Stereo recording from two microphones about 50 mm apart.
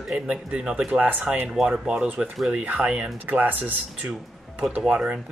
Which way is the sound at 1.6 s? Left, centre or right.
Centre.